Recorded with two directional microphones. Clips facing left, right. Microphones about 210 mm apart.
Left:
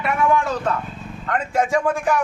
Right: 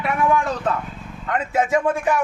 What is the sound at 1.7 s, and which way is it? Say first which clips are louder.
Speech: right 2 dB; 20° right (ahead or behind).